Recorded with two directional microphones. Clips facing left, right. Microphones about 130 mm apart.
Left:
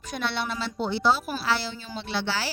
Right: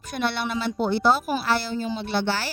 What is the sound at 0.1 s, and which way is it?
A woman's voice, 55° right (ahead or behind).